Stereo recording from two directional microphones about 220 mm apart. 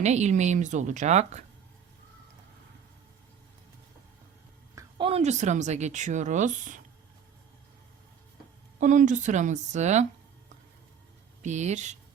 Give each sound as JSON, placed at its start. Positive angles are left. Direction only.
{"t": 0.0, "sound": "speech", "side_deg": -30}
{"t": 4.7, "sound": "speech", "side_deg": -25}
{"t": 8.8, "sound": "speech", "side_deg": -35}
{"t": 11.4, "sound": "speech", "side_deg": -30}